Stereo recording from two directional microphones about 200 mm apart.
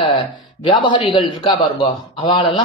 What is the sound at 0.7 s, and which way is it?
Speech, 25° left (ahead or behind).